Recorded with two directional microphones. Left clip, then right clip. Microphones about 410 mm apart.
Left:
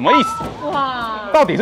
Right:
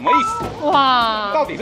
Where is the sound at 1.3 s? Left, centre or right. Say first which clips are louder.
Left 6 dB; left.